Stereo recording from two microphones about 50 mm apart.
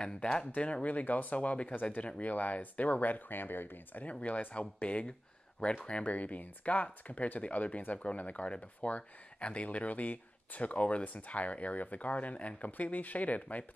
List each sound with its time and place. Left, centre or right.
0.0 s speech: centre; by 4.0 s left
4.0 s speech: left